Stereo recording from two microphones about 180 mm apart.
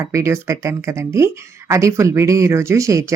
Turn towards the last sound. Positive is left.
turn(degrees=-15)  # may be behind; listen again after turning